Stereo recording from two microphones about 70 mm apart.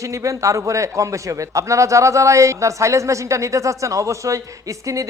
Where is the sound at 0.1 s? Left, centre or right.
Right.